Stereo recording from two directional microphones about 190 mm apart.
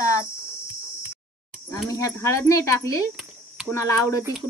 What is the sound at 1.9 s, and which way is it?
Speech, 15° left (ahead or behind).